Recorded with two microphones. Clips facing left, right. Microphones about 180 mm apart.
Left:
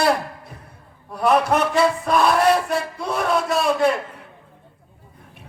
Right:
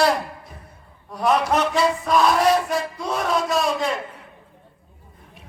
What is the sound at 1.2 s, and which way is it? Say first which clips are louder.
A man's voice: left 2 dB; 60° left (ahead or behind).